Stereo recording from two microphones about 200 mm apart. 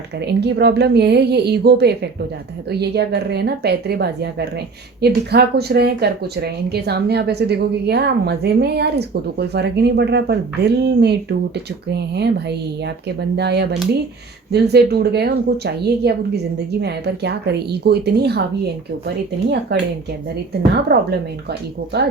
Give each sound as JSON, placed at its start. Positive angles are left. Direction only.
{"t": 0.3, "sound": "speech", "side_deg": -55}
{"t": 20.9, "sound": "speech", "side_deg": -55}